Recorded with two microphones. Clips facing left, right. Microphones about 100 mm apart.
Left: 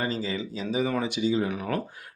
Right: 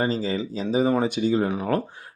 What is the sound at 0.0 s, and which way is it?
Speech, 35° right (ahead or behind).